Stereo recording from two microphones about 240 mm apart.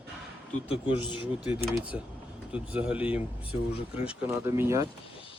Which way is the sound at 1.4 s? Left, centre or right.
Centre.